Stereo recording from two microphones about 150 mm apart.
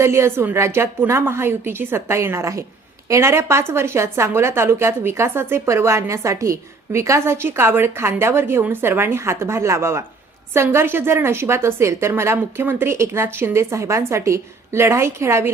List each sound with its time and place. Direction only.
0.0 s a woman's voice: 15° right (ahead or behind)